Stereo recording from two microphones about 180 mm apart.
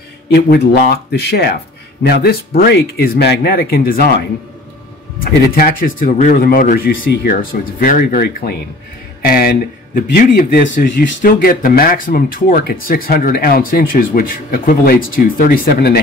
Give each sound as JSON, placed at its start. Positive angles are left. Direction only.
{"t": 0.3, "sound": "speech", "side_deg": 65}